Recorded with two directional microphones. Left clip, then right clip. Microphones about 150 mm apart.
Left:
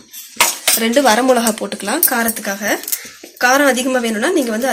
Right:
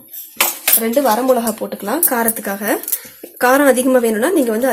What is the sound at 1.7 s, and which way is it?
Speech, 30° right (ahead or behind).